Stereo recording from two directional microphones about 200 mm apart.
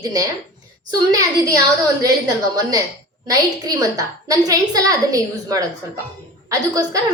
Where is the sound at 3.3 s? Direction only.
15° right (ahead or behind).